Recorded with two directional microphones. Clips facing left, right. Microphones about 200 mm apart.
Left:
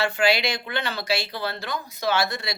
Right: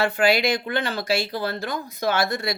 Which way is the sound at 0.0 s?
50° right (ahead or behind).